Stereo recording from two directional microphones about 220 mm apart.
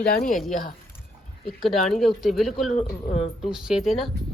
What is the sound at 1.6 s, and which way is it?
A woman's voice, centre (ahead or behind).